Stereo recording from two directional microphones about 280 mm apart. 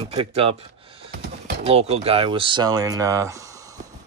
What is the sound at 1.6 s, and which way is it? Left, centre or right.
Speech, right.